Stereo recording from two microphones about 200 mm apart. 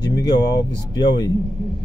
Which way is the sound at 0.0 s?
20° left (ahead or behind).